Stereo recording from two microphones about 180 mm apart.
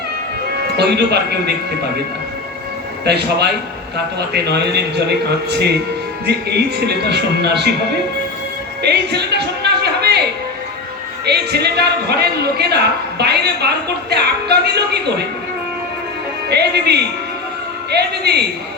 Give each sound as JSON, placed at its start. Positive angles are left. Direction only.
{"t": 0.8, "sound": "a man's voice", "side_deg": -70}
{"t": 3.0, "sound": "a man's voice", "side_deg": -65}
{"t": 8.9, "sound": "a sound", "side_deg": -65}
{"t": 11.3, "sound": "a man's voice", "side_deg": -65}
{"t": 16.5, "sound": "a man's voice", "side_deg": -65}